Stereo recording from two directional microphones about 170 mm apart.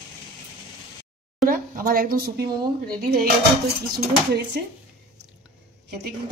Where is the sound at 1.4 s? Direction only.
55° right (ahead or behind).